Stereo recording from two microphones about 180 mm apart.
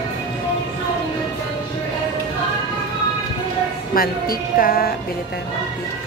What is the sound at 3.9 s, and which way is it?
Speech, 55° left (ahead or behind).